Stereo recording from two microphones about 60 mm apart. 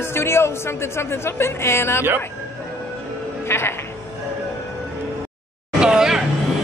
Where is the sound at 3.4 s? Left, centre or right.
Left.